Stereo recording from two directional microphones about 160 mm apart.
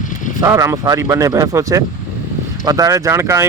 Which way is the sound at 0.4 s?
20° right (ahead or behind).